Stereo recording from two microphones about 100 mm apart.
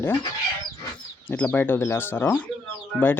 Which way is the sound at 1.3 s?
20° left (ahead or behind).